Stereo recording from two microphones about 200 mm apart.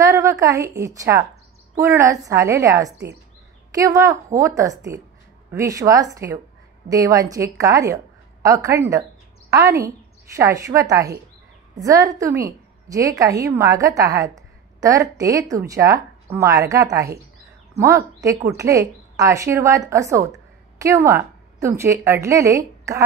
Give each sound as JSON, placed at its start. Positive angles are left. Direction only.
{"t": 0.0, "sound": "a woman's voice", "side_deg": -15}